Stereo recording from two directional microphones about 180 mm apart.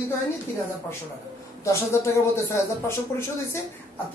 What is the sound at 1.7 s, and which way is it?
Speech, 15° left (ahead or behind).